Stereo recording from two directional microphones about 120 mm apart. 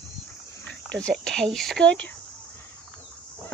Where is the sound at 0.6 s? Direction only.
10° left (ahead or behind).